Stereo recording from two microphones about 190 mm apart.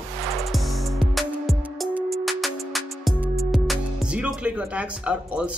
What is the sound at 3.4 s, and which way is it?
A man's voice, centre (ahead or behind).